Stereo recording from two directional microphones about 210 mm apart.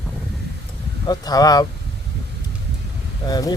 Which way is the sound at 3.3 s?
20° left (ahead or behind).